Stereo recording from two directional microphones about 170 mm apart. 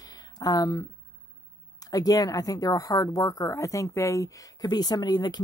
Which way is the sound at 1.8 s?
20° left (ahead or behind).